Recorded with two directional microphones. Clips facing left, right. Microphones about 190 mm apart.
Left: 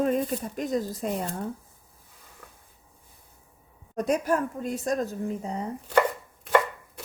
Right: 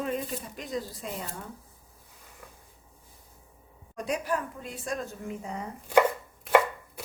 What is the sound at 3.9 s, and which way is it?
A woman's voice, 45° left (ahead or behind).